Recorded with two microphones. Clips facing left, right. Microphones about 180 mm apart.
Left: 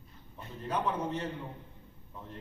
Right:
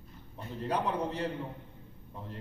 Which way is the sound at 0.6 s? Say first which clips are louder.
Right 1 dB; 35° right (ahead or behind).